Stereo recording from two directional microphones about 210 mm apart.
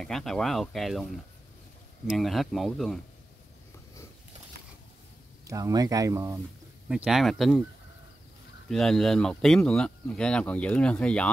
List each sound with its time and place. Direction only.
0.0 s speech: centre (ahead or behind)
2.0 s speech: centre (ahead or behind)
5.5 s speech: 15° right (ahead or behind)
7.1 s speech: centre (ahead or behind)
8.6 s speech: centre (ahead or behind)